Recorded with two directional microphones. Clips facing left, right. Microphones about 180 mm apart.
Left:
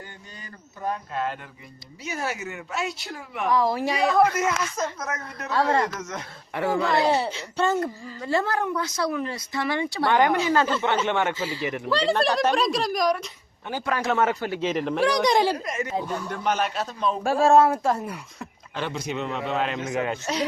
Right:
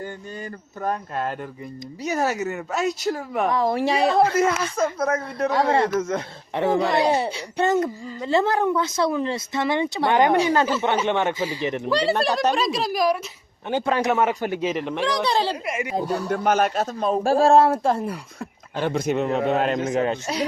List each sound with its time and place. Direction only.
0.8 s a man's voice: 50° right (ahead or behind)
3.8 s a man's voice: 30° right (ahead or behind)
5.5 s speech: 20° right (ahead or behind)
12.5 s speech: centre (ahead or behind)
13.7 s a man's voice: 25° right (ahead or behind)
14.7 s speech: centre (ahead or behind)
15.0 s speech: 15° left (ahead or behind)
15.5 s a man's voice: 10° right (ahead or behind)
16.0 s a man's voice: 35° right (ahead or behind)
18.8 s a man's voice: 50° right (ahead or behind)
19.8 s a man's voice: 30° right (ahead or behind)